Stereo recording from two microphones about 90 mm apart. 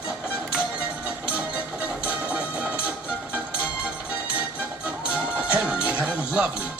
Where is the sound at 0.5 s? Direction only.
15° right (ahead or behind).